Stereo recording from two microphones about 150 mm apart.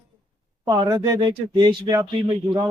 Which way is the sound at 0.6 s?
30° right (ahead or behind).